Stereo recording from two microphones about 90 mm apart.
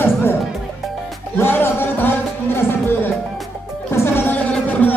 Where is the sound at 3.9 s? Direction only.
25° left (ahead or behind).